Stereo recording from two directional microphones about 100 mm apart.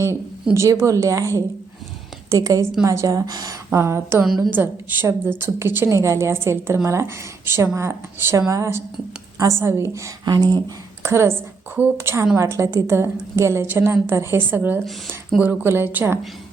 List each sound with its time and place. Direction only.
0.5 s speech: 30° right (ahead or behind)
3.7 s a woman's voice: 25° right (ahead or behind)
10.2 s speech: 45° right (ahead or behind)
11.0 s a woman's voice: 25° right (ahead or behind)
14.8 s speech: centre (ahead or behind)
15.4 s a woman's voice: 20° right (ahead or behind)